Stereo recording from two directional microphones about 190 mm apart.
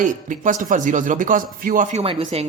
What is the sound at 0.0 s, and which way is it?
Speech, 45° right (ahead or behind).